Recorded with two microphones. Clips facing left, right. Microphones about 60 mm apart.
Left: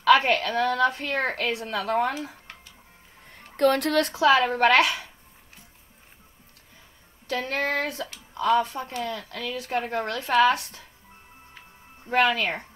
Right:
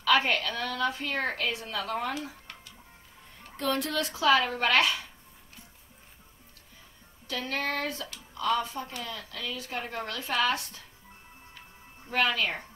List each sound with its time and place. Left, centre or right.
0.1 s a woman's voice: left
3.3 s music: left
4.1 s a woman's voice: left
7.2 s speech: left
8.4 s speech: left
8.6 s a woman's voice: left
12.1 s speech: left